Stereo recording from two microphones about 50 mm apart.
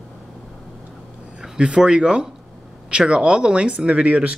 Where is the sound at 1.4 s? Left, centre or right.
Centre.